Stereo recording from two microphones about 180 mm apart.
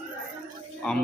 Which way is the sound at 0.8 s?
5° left (ahead or behind).